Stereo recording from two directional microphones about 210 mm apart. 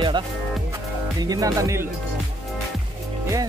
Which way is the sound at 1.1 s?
15° right (ahead or behind).